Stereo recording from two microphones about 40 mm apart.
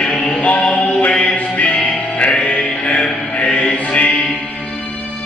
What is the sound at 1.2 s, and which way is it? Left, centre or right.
Music, left.